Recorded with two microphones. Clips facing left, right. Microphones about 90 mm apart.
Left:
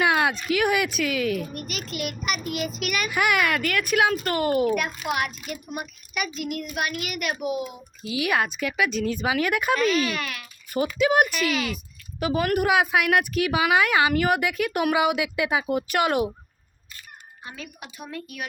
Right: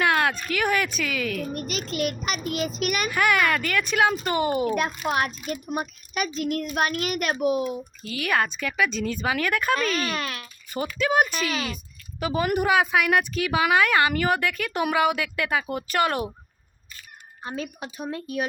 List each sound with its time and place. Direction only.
0.0 s speech: 15° left (ahead or behind)
1.5 s a child's voice: 30° right (ahead or behind)
2.8 s a child's voice: 40° right (ahead or behind)
3.1 s a child's voice: 10° left (ahead or behind)
4.7 s a child's voice: 30° right (ahead or behind)
8.0 s speech: 5° left (ahead or behind)
10.2 s a child's voice: 35° right (ahead or behind)
10.8 s speech: 15° left (ahead or behind)
11.3 s a woman's voice: 25° right (ahead or behind)
12.2 s a child's voice: 5° left (ahead or behind)
17.4 s a woman's voice: 30° right (ahead or behind)